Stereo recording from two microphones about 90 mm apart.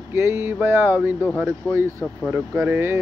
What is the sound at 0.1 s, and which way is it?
Speech, 30° right (ahead or behind).